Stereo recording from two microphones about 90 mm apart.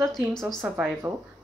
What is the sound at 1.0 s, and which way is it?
Speech, 40° right (ahead or behind).